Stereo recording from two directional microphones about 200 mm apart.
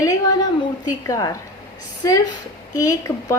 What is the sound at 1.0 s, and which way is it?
A woman's voice, 15° left (ahead or behind).